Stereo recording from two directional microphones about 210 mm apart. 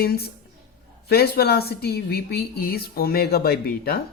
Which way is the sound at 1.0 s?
45° left (ahead or behind).